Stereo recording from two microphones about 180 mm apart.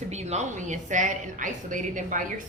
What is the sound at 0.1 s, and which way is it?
A woman's voice, 40° right (ahead or behind).